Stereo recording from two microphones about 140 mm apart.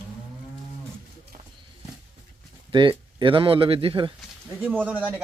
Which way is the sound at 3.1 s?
35° right (ahead or behind).